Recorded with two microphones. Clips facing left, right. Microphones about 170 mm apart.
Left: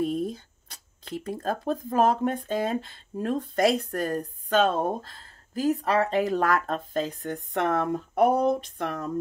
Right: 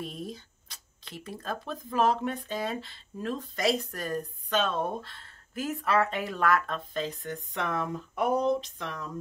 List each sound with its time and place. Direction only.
0.0 s speech: 50° left (ahead or behind)